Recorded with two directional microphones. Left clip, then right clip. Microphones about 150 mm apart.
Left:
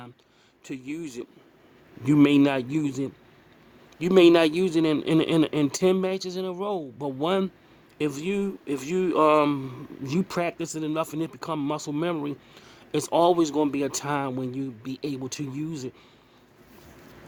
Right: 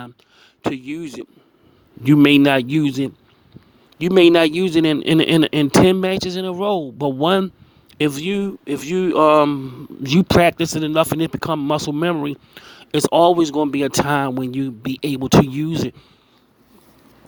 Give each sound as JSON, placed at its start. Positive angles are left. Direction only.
{"t": 0.6, "sound": "speech", "side_deg": -40}
{"t": 9.4, "sound": "speech", "side_deg": -25}
{"t": 10.0, "sound": "speech", "side_deg": -45}